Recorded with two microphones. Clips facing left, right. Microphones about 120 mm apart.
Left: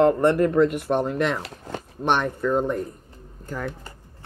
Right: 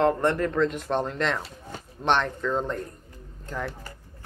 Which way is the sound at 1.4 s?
70° left (ahead or behind).